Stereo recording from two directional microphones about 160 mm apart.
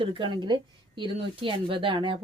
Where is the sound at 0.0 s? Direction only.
35° right (ahead or behind).